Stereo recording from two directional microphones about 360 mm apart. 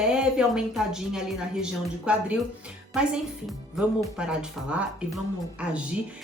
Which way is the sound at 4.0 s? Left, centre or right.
Centre.